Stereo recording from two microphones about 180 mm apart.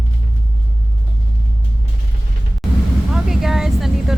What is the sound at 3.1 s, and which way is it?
Vehicle, centre (ahead or behind).